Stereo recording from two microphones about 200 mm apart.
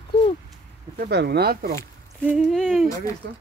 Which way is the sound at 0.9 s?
50° right (ahead or behind).